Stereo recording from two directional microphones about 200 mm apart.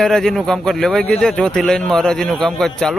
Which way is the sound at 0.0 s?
5° left (ahead or behind).